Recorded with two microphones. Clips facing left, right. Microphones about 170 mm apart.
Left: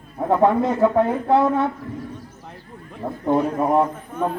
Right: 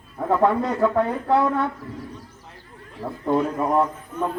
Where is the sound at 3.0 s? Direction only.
20° left (ahead or behind).